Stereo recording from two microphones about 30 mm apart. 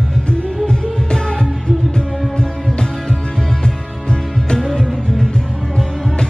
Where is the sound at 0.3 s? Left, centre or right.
Left.